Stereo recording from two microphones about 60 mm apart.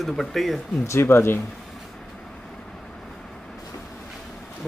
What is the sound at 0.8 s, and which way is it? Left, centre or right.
Speech, left.